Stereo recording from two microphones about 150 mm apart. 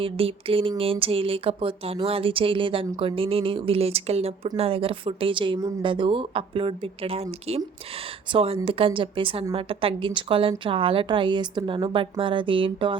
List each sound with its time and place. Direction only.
0.0 s a woman's voice: 40° right (ahead or behind)